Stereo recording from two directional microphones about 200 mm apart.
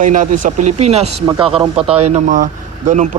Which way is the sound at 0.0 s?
40° right (ahead or behind).